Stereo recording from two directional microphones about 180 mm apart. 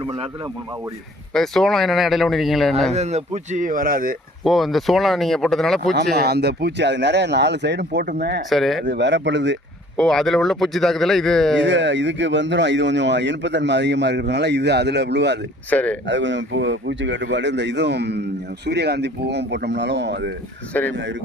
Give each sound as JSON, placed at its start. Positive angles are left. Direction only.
{"t": 1.3, "sound": "speech", "side_deg": 0}
{"t": 2.9, "sound": "speech", "side_deg": -40}
{"t": 4.4, "sound": "speech", "side_deg": 0}
{"t": 6.1, "sound": "speech", "side_deg": -65}
{"t": 8.4, "sound": "speech", "side_deg": 0}
{"t": 8.8, "sound": "speech", "side_deg": -80}
{"t": 10.0, "sound": "speech", "side_deg": 0}
{"t": 11.6, "sound": "speech", "side_deg": -90}
{"t": 15.7, "sound": "speech", "side_deg": 10}
{"t": 16.0, "sound": "speech", "side_deg": -90}
{"t": 20.9, "sound": "speech", "side_deg": -90}